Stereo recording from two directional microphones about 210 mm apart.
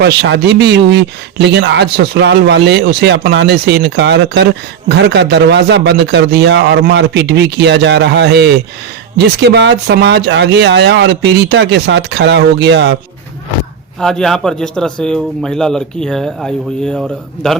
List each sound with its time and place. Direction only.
0.0 s speech: 50° right (ahead or behind)
14.0 s a man's voice: centre (ahead or behind)